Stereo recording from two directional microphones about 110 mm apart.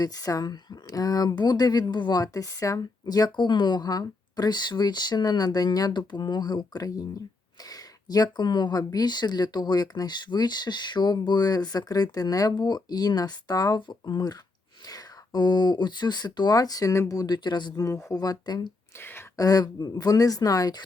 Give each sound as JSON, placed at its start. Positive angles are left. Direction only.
{"t": 0.0, "sound": "speech", "side_deg": 35}
{"t": 18.9, "sound": "speech", "side_deg": 20}
{"t": 19.4, "sound": "speech", "side_deg": 35}